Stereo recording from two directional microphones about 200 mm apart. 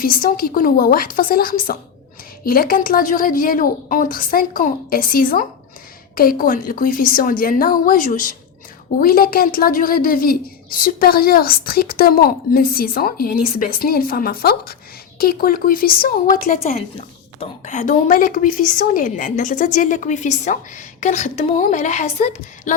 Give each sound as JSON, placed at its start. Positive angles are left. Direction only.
{"t": 0.0, "sound": "a woman's voice", "side_deg": 45}